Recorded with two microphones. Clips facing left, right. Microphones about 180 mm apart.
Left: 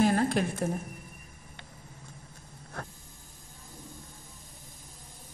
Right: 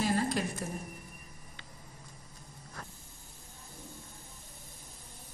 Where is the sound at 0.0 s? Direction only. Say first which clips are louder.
Left 5 dB; 55° left (ahead or behind).